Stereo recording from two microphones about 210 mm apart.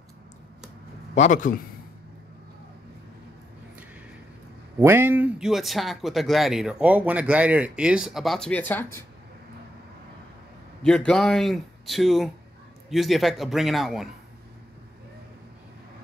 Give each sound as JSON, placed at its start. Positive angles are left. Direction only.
{"t": 1.1, "sound": "a man's voice", "side_deg": 35}
{"t": 4.7, "sound": "speech", "side_deg": -10}
{"t": 10.8, "sound": "speech", "side_deg": 5}